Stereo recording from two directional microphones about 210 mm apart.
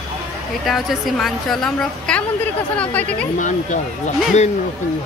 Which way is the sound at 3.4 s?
35° left (ahead or behind).